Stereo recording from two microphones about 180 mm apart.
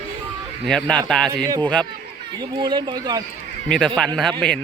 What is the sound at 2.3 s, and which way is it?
Speech, 25° right (ahead or behind).